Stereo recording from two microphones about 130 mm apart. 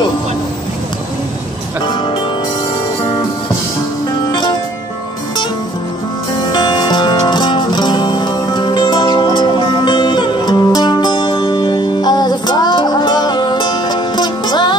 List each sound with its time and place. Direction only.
4.3 s music: 35° left (ahead or behind)
6.5 s music: 35° left (ahead or behind)